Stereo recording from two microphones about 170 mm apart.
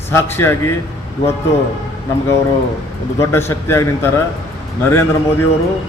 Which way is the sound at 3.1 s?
15° left (ahead or behind).